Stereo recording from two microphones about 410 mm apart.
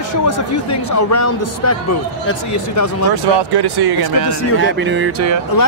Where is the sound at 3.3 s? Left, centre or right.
Right.